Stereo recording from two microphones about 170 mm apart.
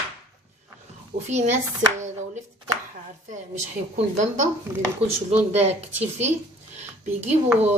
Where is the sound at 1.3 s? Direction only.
40° right (ahead or behind).